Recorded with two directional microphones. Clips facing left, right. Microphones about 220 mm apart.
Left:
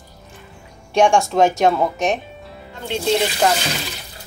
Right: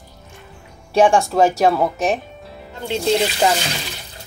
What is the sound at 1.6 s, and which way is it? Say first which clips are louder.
Music: even; centre (ahead or behind).